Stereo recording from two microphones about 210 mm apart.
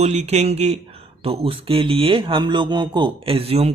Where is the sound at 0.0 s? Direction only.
30° right (ahead or behind).